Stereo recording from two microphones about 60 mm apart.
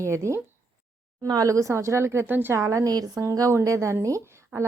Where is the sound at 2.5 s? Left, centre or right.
Right.